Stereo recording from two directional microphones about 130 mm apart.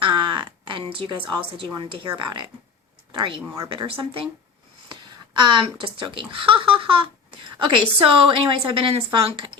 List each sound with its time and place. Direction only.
0.0 s speech: 35° right (ahead or behind)
5.3 s speech: 35° right (ahead or behind)